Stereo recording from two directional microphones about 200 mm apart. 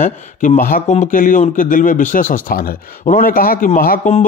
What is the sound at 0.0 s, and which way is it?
Speech, 40° left (ahead or behind).